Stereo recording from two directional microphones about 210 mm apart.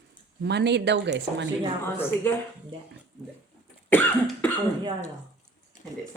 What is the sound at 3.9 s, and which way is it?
Cough, 5° left (ahead or behind).